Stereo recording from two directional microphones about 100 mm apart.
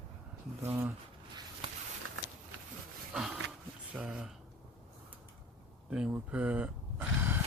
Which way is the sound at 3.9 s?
10° right (ahead or behind).